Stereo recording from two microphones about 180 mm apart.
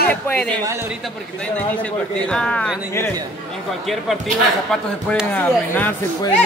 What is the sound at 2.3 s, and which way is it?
Speech, 5° left (ahead or behind).